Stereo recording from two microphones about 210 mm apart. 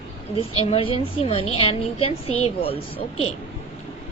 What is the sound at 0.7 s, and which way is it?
Speech, 25° left (ahead or behind).